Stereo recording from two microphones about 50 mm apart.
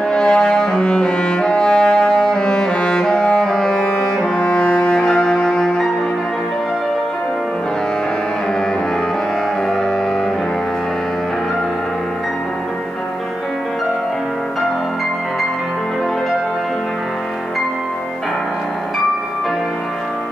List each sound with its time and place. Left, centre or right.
0.1 s music: centre